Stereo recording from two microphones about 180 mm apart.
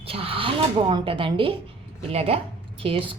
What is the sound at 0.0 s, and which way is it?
A woman's voice, 30° right (ahead or behind).